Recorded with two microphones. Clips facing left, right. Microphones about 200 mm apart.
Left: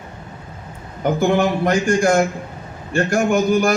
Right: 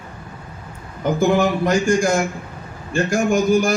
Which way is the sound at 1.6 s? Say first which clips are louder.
Left 1 dB; 60° left (ahead or behind).